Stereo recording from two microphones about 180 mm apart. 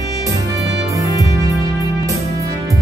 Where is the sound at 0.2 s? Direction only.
20° right (ahead or behind).